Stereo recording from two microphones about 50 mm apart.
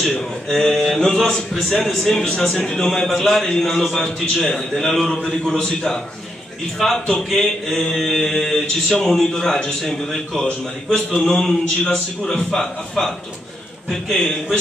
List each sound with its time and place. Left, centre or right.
0.2 s mantra: centre
2.6 s a man's voice: centre
4.9 s mantra: centre
13.8 s a man's voice: centre